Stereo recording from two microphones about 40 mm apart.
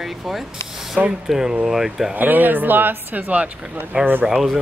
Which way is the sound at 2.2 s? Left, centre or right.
Right.